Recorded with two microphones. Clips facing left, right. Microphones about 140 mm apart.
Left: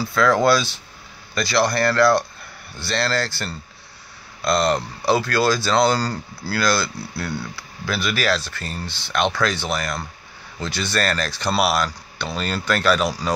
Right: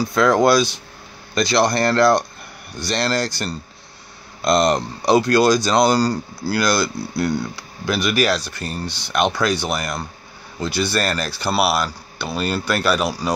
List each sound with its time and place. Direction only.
0.0 s speech: 15° right (ahead or behind)